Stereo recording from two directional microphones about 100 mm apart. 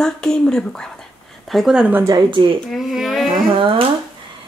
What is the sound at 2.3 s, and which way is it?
Speech, 55° right (ahead or behind).